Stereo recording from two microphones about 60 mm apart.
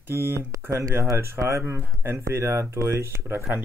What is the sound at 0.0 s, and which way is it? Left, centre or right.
Speech, right.